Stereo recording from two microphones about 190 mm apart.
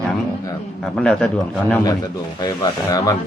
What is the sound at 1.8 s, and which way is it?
A man's voice, 20° left (ahead or behind).